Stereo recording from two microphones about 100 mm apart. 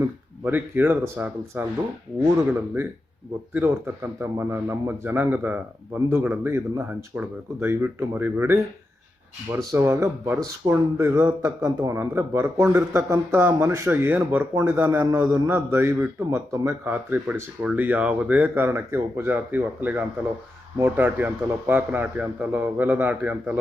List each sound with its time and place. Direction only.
0.4 s speech: 20° right (ahead or behind)
3.5 s speech: 20° right (ahead or behind)
11.6 s a man's voice: 35° right (ahead or behind)
11.9 s a man's voice: 25° right (ahead or behind)